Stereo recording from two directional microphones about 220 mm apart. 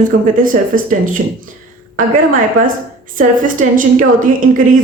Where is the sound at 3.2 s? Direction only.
35° right (ahead or behind).